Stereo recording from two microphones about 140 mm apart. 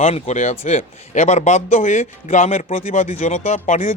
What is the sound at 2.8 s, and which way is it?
Speech, 60° left (ahead or behind).